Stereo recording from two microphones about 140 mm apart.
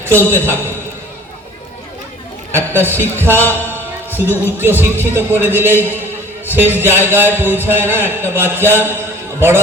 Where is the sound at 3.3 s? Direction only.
15° left (ahead or behind).